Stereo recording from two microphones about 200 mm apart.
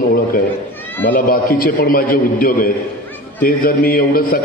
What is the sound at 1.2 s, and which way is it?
A man's voice, 45° left (ahead or behind).